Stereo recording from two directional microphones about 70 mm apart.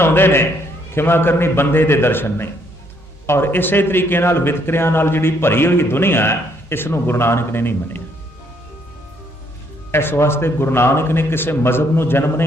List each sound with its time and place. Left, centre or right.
0.0 s a man's voice: left
9.9 s a man's voice: left